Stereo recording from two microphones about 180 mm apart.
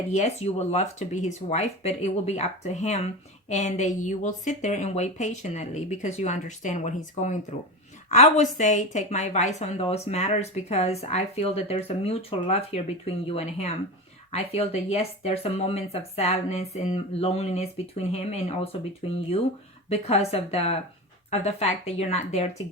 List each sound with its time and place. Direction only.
0.1 s a woman's voice: 40° left (ahead or behind)